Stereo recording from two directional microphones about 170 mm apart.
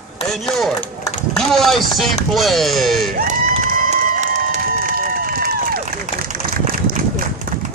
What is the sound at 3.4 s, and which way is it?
Run, 60° right (ahead or behind).